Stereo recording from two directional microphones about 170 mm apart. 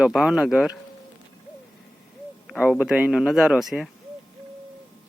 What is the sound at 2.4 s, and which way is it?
Speech, centre (ahead or behind).